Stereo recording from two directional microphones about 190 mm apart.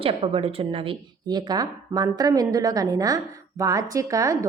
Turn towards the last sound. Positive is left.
turn(degrees=-15)  # may be behind; listen again after turning